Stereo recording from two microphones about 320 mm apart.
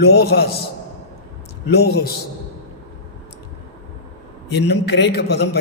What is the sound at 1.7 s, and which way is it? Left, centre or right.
Speech, left.